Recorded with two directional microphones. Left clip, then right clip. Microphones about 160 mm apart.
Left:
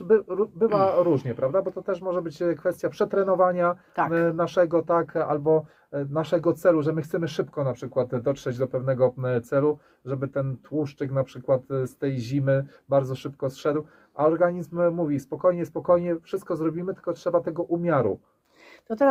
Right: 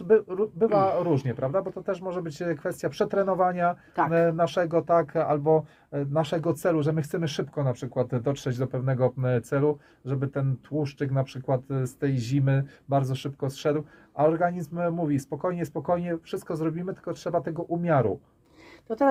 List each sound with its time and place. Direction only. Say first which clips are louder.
0.1 s speech: left 1 dB; 35° right (ahead or behind)
18.9 s speech: left 2 dB; 25° left (ahead or behind)